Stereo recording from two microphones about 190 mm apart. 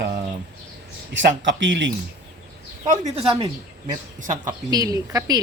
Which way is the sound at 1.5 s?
70° right (ahead or behind).